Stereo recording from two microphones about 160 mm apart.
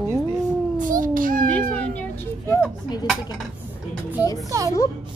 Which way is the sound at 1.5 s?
10° left (ahead or behind).